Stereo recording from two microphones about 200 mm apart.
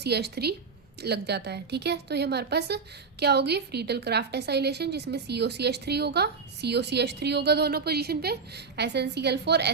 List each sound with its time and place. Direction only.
0.0 s speech: 55° right (ahead or behind)